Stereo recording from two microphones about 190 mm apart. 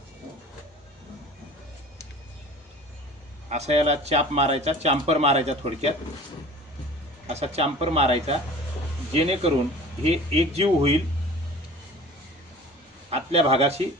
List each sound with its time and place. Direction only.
3.5 s speech: 35° right (ahead or behind)
7.3 s speech: 35° right (ahead or behind)
13.1 s speech: 30° right (ahead or behind)